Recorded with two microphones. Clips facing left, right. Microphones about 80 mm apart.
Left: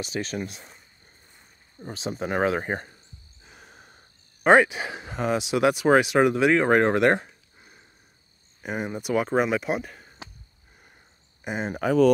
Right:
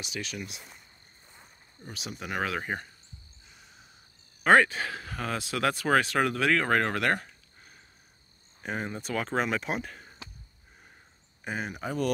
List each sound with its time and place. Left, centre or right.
0.0 s speech: left
1.8 s speech: left
3.4 s snort: left
4.4 s speech: centre
11.4 s speech: left